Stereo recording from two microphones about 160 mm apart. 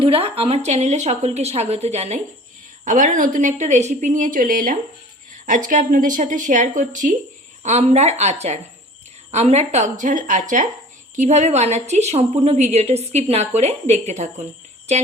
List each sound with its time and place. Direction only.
0.0 s a woman's voice: 35° right (ahead or behind)